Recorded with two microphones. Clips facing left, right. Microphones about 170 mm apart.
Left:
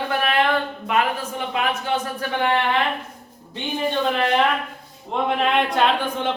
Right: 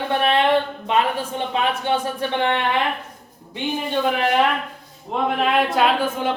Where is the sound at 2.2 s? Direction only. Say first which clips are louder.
Right 3 dB; 25° right (ahead or behind).